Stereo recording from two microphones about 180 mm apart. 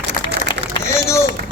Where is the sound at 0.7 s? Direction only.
15° left (ahead or behind).